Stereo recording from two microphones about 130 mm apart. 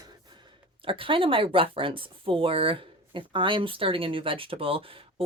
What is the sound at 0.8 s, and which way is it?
Speech, 40° right (ahead or behind).